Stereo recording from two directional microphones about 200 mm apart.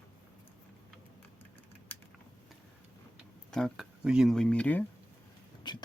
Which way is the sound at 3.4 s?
Centre (ahead or behind).